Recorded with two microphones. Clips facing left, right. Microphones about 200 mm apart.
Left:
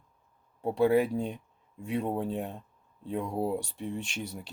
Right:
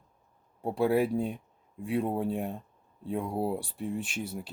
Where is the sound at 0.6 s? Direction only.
10° right (ahead or behind).